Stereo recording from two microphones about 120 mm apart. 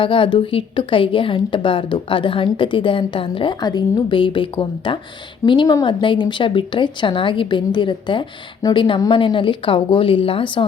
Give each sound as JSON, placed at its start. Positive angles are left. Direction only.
{"t": 0.0, "sound": "speech", "side_deg": 45}